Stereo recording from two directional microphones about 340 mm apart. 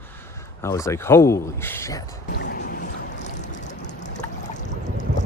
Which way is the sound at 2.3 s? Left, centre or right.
Left.